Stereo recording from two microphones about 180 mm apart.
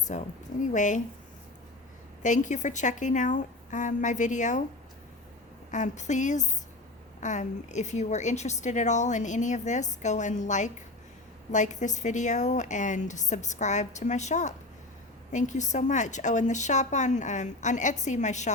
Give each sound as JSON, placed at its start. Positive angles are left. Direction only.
{"t": 0.1, "sound": "a woman's voice", "side_deg": 40}
{"t": 2.2, "sound": "a woman's voice", "side_deg": 45}
{"t": 5.7, "sound": "a woman's voice", "side_deg": 40}